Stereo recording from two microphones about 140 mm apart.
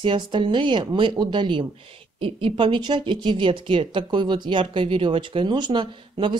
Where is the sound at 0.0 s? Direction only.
35° right (ahead or behind).